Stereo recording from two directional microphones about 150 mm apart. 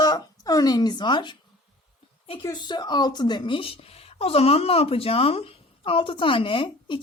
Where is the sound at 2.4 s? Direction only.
25° left (ahead or behind).